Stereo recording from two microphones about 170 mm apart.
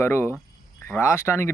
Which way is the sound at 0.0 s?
15° left (ahead or behind).